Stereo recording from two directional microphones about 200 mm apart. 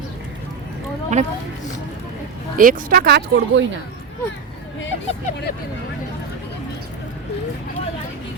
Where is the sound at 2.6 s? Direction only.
45° right (ahead or behind).